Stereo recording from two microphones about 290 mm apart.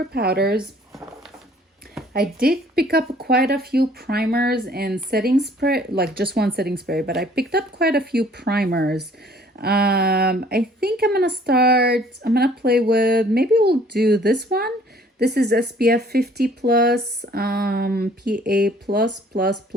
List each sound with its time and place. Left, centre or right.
0.1 s speech: right
2.1 s speech: right